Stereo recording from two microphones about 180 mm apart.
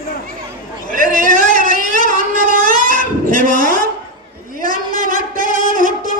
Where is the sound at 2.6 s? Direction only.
50° right (ahead or behind).